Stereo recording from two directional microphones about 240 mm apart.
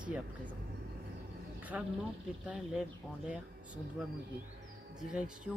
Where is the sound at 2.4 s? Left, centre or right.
Centre.